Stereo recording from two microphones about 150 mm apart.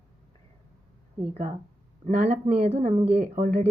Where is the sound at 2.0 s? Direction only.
50° right (ahead or behind).